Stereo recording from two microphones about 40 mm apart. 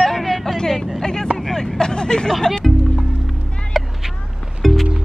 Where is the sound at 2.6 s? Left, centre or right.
Centre.